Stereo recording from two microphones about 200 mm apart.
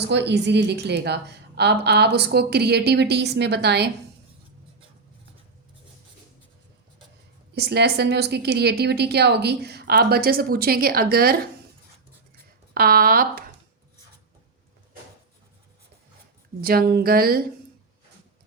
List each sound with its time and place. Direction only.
0.0 s a woman's voice: 60° right (ahead or behind)
7.5 s a woman's voice: 55° right (ahead or behind)
12.7 s a woman's voice: 50° right (ahead or behind)
16.6 s a woman's voice: 50° right (ahead or behind)